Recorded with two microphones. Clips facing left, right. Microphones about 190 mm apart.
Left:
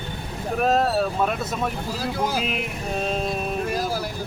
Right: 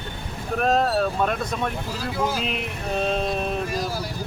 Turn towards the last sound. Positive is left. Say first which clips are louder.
# right 1 dB
turn(degrees=0)  # may be behind; listen again after turning